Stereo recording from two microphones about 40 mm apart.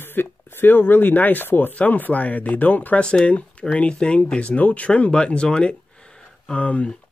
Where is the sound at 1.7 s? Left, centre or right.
Left.